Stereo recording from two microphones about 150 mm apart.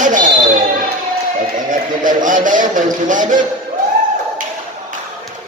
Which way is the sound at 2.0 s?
60° right (ahead or behind).